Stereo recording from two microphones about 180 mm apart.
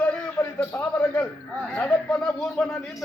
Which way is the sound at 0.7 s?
5° left (ahead or behind).